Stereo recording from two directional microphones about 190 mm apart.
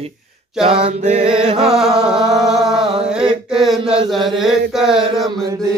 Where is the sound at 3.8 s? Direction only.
30° right (ahead or behind).